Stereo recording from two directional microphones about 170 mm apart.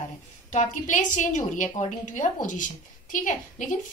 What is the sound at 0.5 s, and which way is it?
Speech, 45° left (ahead or behind).